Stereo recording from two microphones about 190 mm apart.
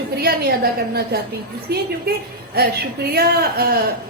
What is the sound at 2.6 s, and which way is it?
A woman's voice, 55° right (ahead or behind).